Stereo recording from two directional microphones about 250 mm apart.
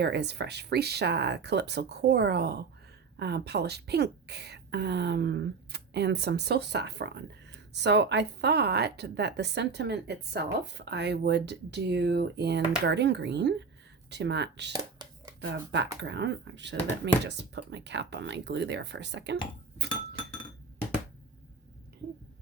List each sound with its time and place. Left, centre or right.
0.0 s a woman's voice: right